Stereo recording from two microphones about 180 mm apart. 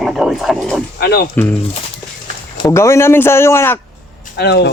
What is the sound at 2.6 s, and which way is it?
Speech, 15° left (ahead or behind).